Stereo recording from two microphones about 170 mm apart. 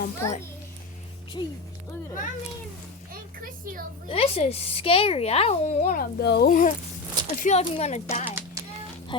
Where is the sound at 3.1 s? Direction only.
55° right (ahead or behind).